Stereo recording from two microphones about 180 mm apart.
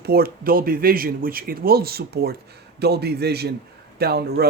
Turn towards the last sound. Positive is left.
turn(degrees=-60)  # may be behind; listen again after turning